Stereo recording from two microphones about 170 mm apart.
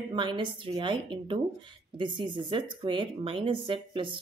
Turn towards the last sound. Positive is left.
turn(degrees=-30)  # may be behind; listen again after turning